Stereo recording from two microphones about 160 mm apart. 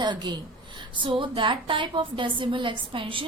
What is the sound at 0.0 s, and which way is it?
A woman's voice, 30° right (ahead or behind).